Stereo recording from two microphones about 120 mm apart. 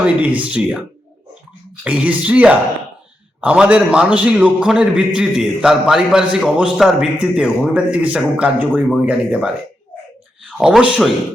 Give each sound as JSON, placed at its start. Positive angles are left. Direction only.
{"t": 0.0, "sound": "a man's voice", "side_deg": -10}
{"t": 1.8, "sound": "a man's voice", "side_deg": -10}
{"t": 10.6, "sound": "a man's voice", "side_deg": -10}